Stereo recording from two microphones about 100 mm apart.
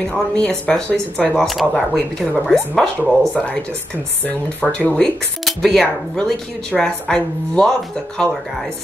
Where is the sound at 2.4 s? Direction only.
5° left (ahead or behind).